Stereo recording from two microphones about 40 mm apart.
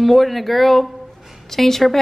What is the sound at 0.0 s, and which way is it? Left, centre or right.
A woman's voice, centre.